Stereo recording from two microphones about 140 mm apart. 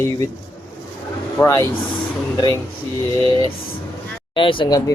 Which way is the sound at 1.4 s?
20° left (ahead or behind).